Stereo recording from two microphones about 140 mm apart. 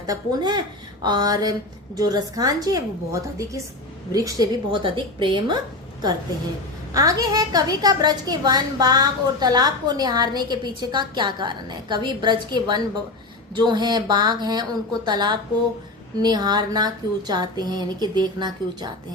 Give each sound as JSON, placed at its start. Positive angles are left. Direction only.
{"t": 0.1, "sound": "a woman's voice", "side_deg": -30}
{"t": 6.9, "sound": "a woman's voice", "side_deg": -25}